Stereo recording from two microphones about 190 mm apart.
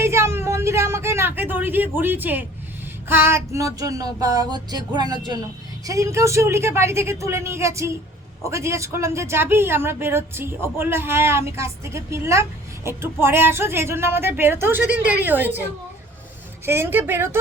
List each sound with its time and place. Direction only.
0.0 s a sound: 15° right (ahead or behind)
5.8 s speech: 15° right (ahead or behind)
16.6 s speech: 10° right (ahead or behind)